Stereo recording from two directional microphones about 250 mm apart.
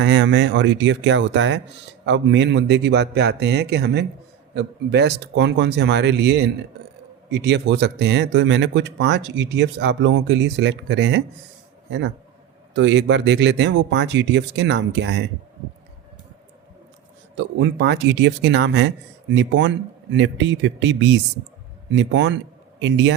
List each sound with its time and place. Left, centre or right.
0.0 s a man's voice: right
17.3 s speech: right